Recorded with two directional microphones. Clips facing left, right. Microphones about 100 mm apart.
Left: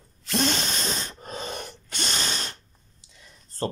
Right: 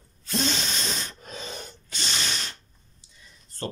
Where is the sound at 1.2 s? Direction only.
45° left (ahead or behind).